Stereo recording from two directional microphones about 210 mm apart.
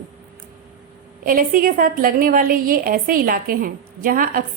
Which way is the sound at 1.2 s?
40° right (ahead or behind).